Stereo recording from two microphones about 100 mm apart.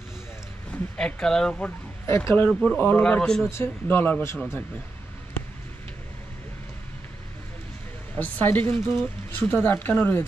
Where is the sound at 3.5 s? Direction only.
25° left (ahead or behind).